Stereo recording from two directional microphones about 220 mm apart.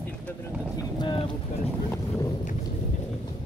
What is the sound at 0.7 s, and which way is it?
Speech, 20° left (ahead or behind).